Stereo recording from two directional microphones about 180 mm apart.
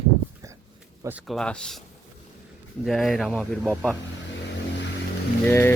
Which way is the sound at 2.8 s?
Centre (ahead or behind).